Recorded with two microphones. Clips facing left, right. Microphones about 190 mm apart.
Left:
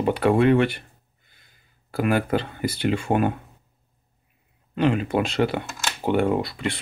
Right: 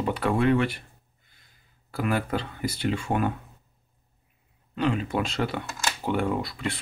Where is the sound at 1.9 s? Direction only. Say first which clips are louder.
Left 5 dB; 65° left (ahead or behind).